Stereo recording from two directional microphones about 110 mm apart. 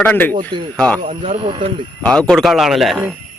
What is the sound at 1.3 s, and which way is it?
Speech, 55° right (ahead or behind).